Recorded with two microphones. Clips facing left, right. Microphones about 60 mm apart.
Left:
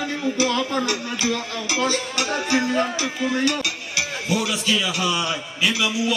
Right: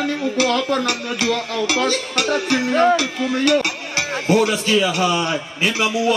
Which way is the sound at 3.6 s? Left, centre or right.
Right.